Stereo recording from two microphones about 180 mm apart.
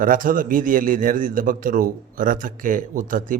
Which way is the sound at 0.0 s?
50° right (ahead or behind).